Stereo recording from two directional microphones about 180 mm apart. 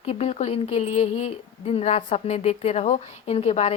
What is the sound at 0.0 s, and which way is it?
Speech, 35° left (ahead or behind).